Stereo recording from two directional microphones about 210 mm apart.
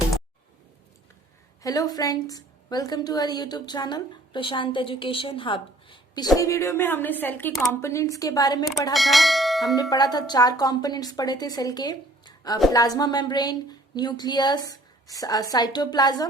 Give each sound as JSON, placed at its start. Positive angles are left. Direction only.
{"t": 1.6, "sound": "a woman's voice", "side_deg": 15}
{"t": 8.9, "sound": "speech", "side_deg": 0}
{"t": 9.9, "sound": "a woman's voice", "side_deg": 20}